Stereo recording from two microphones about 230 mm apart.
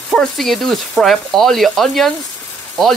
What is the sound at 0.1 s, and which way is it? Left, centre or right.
Speech, centre.